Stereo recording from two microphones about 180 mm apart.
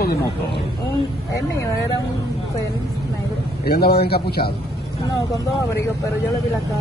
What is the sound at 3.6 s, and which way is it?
Speech, 60° left (ahead or behind).